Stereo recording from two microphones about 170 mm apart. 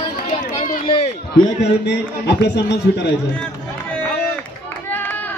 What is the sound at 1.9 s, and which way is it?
A man's voice, 90° left.